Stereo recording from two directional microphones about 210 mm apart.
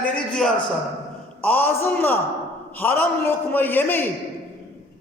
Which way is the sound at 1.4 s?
10° left (ahead or behind).